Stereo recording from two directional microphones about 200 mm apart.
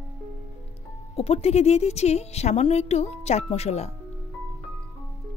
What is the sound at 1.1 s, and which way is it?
A woman's voice, 30° left (ahead or behind).